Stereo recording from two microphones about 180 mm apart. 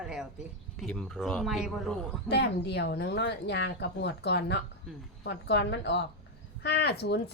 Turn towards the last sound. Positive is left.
turn(degrees=65)  # may be behind; listen again after turning